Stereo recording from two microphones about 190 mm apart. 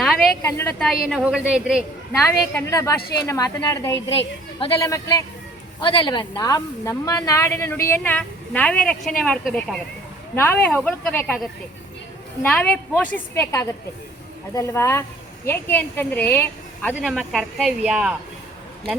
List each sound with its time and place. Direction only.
0.0 s a sound: centre (ahead or behind)
0.5 s speech: 10° left (ahead or behind)
1.1 s speech: 5° right (ahead or behind)
2.6 s speech: 15° left (ahead or behind)
12.4 s speech: 10° left (ahead or behind)
16.9 s speech: centre (ahead or behind)